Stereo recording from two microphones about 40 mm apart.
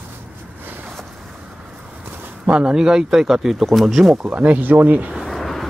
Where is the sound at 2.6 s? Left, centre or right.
Centre.